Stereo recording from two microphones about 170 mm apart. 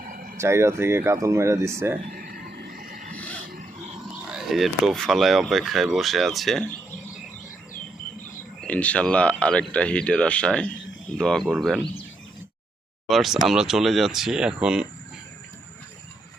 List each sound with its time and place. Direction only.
0.1 s a sound: 55° right (ahead or behind)
0.3 s speech: 15° right (ahead or behind)
2.0 s a sound: 60° right (ahead or behind)
4.3 s speech: centre (ahead or behind)
8.6 s speech: 10° left (ahead or behind)
13.1 s speech: centre (ahead or behind)